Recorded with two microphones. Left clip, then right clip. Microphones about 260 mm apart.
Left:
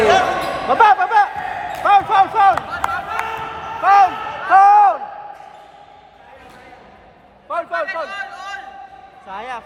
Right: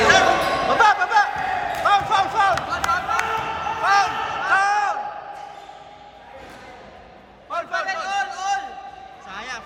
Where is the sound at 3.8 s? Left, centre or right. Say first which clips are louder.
Left 7 dB; left.